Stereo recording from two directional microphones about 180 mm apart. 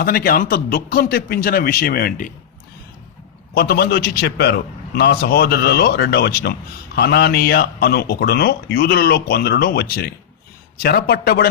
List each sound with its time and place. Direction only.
0.0 s a man's voice: 55° left (ahead or behind)
3.5 s a man's voice: 60° left (ahead or behind)